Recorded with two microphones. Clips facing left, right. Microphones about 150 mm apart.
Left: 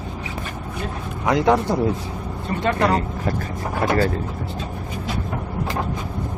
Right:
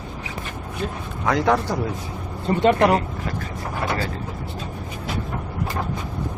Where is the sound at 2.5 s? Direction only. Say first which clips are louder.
Right 3 dB; 20° right (ahead or behind).